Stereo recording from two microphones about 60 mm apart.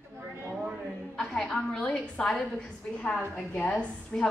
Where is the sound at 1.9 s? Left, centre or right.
Centre.